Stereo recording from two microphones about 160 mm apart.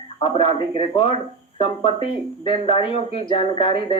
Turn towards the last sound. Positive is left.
turn(degrees=35)  # may be behind; listen again after turning